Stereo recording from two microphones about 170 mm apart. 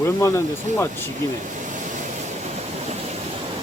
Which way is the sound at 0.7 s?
45° right (ahead or behind).